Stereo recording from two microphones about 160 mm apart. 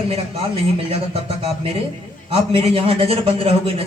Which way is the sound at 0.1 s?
35° right (ahead or behind).